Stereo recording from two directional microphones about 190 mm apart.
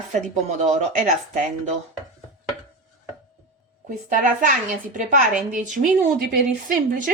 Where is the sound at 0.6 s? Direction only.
40° right (ahead or behind).